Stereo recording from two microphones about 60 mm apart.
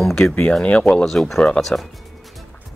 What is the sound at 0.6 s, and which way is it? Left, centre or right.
Speech, centre.